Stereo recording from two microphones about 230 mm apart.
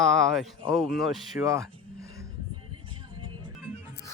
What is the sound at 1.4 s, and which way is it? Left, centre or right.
Speech, centre.